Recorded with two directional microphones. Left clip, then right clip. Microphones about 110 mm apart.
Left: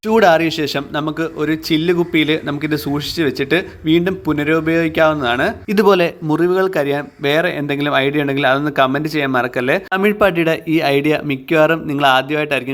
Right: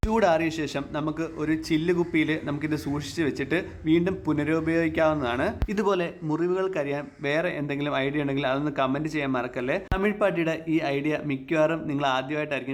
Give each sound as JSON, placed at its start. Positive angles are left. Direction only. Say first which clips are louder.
{"t": 0.0, "sound": "speech", "louder": "left 11 dB", "side_deg": 30}